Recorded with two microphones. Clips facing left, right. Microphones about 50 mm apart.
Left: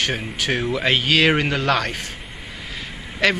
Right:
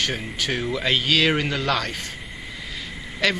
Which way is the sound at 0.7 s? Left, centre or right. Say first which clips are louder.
Left 2 dB; left.